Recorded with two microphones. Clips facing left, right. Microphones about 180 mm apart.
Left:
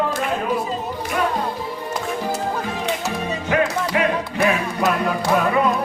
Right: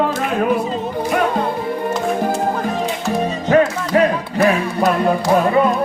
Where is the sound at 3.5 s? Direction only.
40° right (ahead or behind).